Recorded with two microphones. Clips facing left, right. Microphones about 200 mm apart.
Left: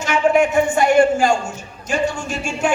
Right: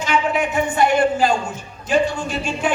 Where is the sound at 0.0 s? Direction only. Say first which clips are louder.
Left 5 dB; 50° left (ahead or behind).